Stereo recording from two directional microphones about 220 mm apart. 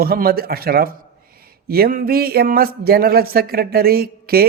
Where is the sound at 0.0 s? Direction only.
45° right (ahead or behind).